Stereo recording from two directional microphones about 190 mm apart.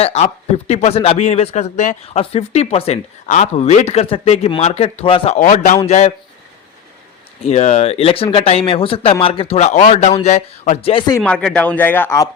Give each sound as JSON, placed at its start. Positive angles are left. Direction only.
{"t": 0.0, "sound": "speech", "side_deg": 35}
{"t": 5.4, "sound": "speech", "side_deg": 40}
{"t": 7.4, "sound": "speech", "side_deg": 35}
{"t": 11.2, "sound": "speech", "side_deg": 5}